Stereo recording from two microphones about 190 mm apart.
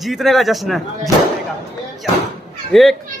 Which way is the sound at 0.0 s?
Centre (ahead or behind).